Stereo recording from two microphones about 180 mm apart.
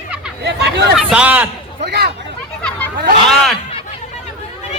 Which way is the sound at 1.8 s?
65° right (ahead or behind).